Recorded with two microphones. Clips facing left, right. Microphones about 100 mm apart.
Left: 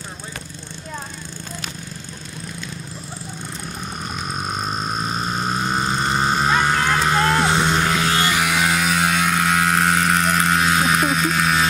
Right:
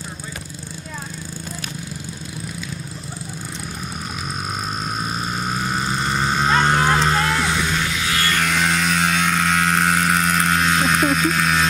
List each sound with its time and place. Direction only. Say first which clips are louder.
5.7 s vehicle: left 2 dB; 25° left (ahead or behind)
6.2 s a sound: right 1 dB; 5° left (ahead or behind)
6.6 s vehicle: right 2 dB; 20° right (ahead or behind)
7.2 s vehicle: left 3 dB; 45° left (ahead or behind)
8.2 s vehicle: left 1 dB; 10° left (ahead or behind)